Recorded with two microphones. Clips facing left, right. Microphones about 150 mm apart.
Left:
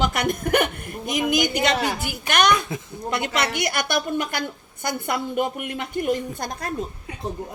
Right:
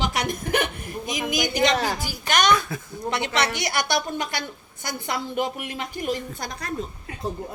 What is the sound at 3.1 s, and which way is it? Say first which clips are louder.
A woman's voice: even; 50° left (ahead or behind).